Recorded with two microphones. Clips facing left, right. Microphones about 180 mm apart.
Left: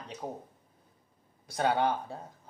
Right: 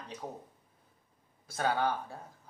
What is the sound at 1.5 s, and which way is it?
Speech, 20° left (ahead or behind).